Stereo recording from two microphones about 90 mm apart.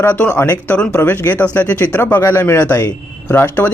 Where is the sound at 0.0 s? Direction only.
20° left (ahead or behind).